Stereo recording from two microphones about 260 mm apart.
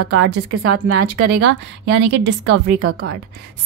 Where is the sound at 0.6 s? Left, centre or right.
Right.